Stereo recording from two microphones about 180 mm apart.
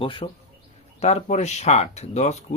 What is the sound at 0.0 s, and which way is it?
Speech, 30° left (ahead or behind).